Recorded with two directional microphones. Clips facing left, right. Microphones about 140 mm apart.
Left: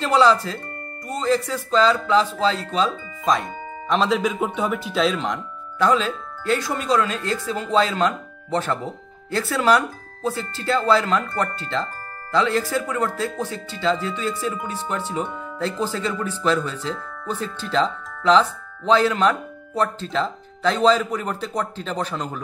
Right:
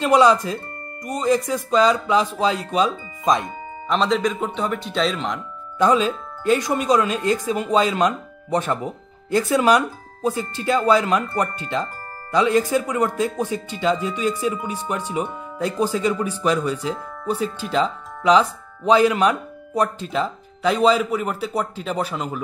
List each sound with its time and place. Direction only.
0.0 s speech: 15° right (ahead or behind)
3.9 s speech: centre (ahead or behind)
5.8 s speech: 15° right (ahead or behind)